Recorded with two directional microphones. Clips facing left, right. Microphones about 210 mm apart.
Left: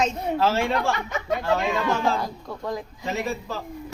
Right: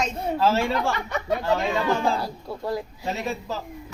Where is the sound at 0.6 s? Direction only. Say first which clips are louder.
Left 1 dB; centre (ahead or behind).